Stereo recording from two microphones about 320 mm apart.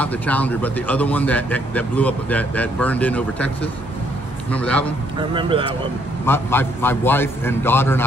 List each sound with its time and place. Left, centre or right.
0.0 s speech: centre
5.3 s speech: centre
6.2 s a man's voice: centre